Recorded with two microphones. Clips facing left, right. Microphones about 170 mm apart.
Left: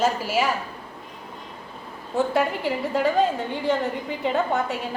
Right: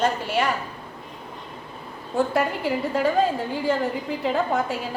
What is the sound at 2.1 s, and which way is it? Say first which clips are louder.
A woman's voice: even; centre (ahead or behind).